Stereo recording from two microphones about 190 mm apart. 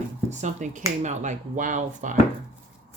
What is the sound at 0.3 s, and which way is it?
Speech, 40° right (ahead or behind).